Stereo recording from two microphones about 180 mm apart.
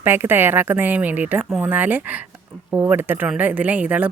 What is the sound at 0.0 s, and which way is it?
Speech, 10° right (ahead or behind).